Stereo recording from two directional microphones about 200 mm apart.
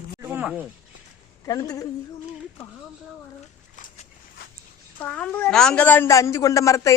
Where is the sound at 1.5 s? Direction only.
15° left (ahead or behind).